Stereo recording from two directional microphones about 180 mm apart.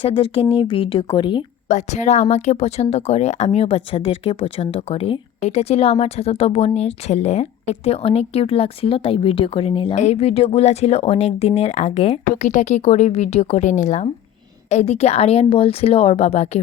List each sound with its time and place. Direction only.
0.0 s speech: 30° left (ahead or behind)
1.6 s speech: 40° left (ahead or behind)